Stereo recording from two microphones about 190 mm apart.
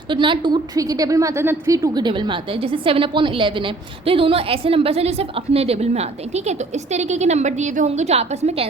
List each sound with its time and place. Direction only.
0.1 s a woman's voice: 25° right (ahead or behind)